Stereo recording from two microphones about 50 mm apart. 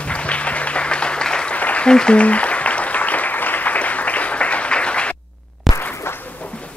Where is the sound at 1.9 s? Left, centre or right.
Centre.